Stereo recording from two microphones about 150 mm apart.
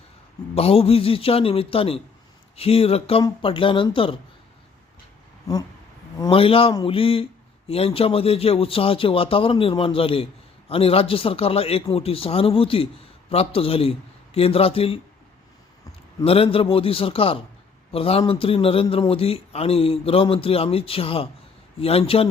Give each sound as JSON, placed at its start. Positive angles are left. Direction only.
{"t": 0.5, "sound": "a man's voice", "side_deg": 40}
{"t": 6.3, "sound": "a man's voice", "side_deg": 40}
{"t": 16.2, "sound": "a man's voice", "side_deg": 40}